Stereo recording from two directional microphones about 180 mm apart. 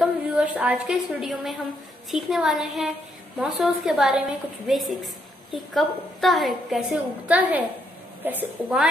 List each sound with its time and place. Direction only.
0.0 s a woman's voice: 10° right (ahead or behind)